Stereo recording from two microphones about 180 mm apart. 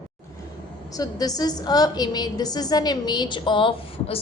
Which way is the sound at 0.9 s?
20° left (ahead or behind).